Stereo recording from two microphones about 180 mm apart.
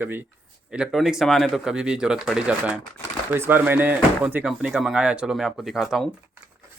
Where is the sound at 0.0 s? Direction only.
10° right (ahead or behind).